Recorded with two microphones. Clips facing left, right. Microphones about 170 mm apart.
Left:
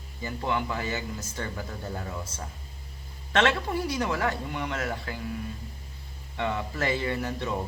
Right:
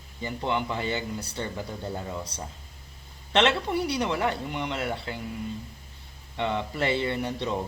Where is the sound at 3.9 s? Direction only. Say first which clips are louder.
Right 1 dB; 20° right (ahead or behind).